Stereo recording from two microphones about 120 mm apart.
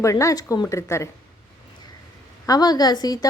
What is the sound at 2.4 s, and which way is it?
Speech, 30° left (ahead or behind).